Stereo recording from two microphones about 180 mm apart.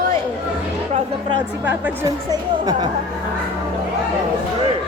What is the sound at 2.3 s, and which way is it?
Speech, 20° right (ahead or behind).